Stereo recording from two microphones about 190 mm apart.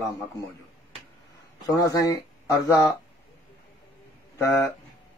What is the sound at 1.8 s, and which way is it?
Speech, 20° left (ahead or behind).